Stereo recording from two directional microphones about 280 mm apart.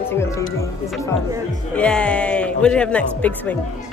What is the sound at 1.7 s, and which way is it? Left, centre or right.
Speech, centre.